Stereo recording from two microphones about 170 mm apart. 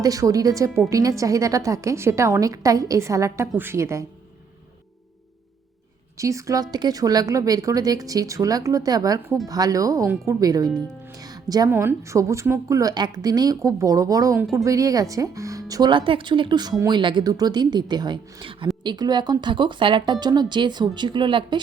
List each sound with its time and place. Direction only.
0.0 s speech: 20° right (ahead or behind)
6.1 s speech: 20° right (ahead or behind)